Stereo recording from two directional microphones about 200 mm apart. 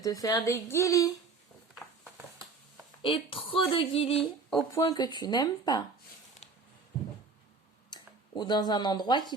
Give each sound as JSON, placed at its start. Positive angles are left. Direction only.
{"t": 0.0, "sound": "speech", "side_deg": 20}
{"t": 3.0, "sound": "speech", "side_deg": 25}
{"t": 7.9, "sound": "speech", "side_deg": 20}